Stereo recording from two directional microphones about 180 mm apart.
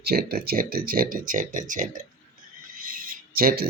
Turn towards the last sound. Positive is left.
turn(degrees=-55)  # may be behind; listen again after turning